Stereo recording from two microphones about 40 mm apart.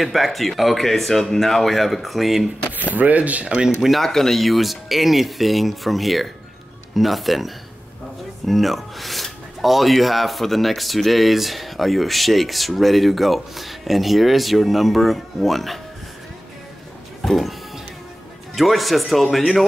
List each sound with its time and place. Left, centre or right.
0.0 s speech: centre
2.9 s speech: right
4.0 s speech: centre
17.2 s music: centre
18.5 s speech: centre